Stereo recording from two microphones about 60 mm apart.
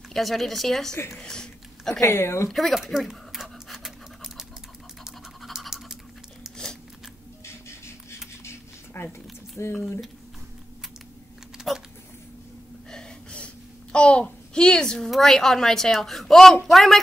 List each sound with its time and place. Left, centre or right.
0.1 s a woman's voice: centre
1.2 s a sound: centre
2.0 s speech: left
2.5 s pant: centre
5.4 s toothbrush: centre
6.6 s biting: centre
7.4 s a sound: left
9.7 s speech: left
11.5 s typing: centre
12.9 s gasp: centre
13.9 s a child's voice: centre